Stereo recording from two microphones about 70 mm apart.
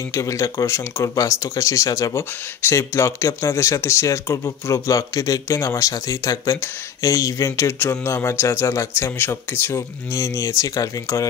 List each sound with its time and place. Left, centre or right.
0.1 s speech: left
2.1 s speech: left